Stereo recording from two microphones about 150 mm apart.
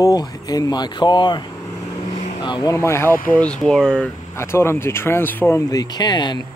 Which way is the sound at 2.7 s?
20° left (ahead or behind).